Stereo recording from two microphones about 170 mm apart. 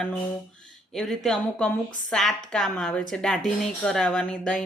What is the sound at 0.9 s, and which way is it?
Speech, centre (ahead or behind).